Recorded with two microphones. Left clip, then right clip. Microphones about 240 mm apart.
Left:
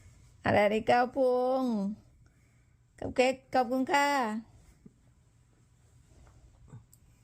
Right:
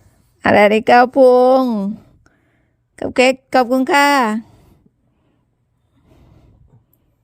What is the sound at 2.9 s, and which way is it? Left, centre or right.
A woman's voice, right.